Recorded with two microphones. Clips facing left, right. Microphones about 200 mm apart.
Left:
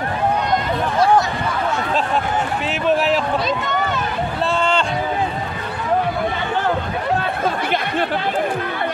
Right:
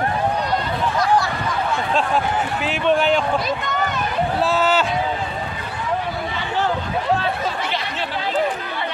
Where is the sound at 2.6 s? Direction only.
5° left (ahead or behind).